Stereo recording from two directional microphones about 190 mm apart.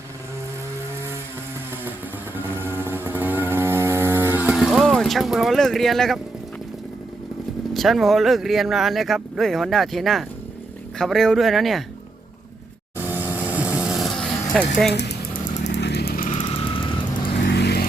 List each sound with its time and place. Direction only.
2.3 s motorcycle: 10° right (ahead or behind)
7.7 s speech: centre (ahead or behind)
13.2 s vehicle: 10° right (ahead or behind)
14.5 s speech: centre (ahead or behind)
14.9 s a sound: 60° left (ahead or behind)
15.7 s vehicle: 60° left (ahead or behind)
16.8 s vehicle: 25° left (ahead or behind)
17.4 s vehicle: 60° left (ahead or behind)